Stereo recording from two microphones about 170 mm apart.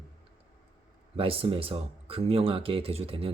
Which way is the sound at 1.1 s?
35° right (ahead or behind).